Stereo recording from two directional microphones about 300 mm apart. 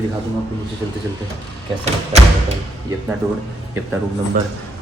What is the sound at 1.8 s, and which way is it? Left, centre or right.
Speech, right.